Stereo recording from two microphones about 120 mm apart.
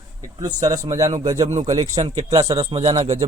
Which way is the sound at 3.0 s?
60° right (ahead or behind).